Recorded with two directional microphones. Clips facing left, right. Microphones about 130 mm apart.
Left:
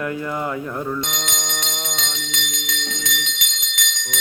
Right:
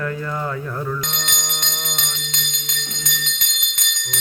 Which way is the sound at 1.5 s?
15° left (ahead or behind).